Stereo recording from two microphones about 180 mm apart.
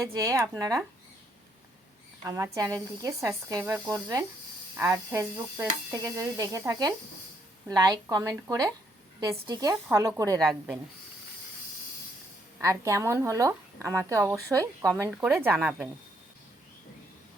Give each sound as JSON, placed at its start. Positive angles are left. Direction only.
{"t": 0.0, "sound": "speech", "side_deg": -15}
{"t": 2.2, "sound": "a woman's voice", "side_deg": -15}
{"t": 10.4, "sound": "speech", "side_deg": 0}
{"t": 12.6, "sound": "speech", "side_deg": -15}